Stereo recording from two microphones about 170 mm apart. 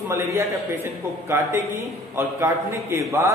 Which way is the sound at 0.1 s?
15° right (ahead or behind).